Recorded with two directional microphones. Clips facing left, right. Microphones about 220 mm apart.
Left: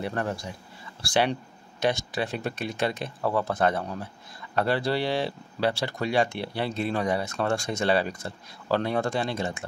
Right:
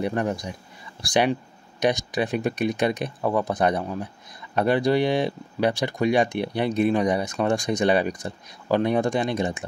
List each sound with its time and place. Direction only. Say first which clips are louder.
0.0 s speech: right 5 dB; 15° right (ahead or behind)